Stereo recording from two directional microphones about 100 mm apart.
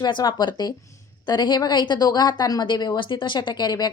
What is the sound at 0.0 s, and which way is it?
Speech, 50° left (ahead or behind).